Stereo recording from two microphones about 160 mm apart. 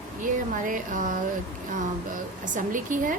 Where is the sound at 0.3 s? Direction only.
55° right (ahead or behind).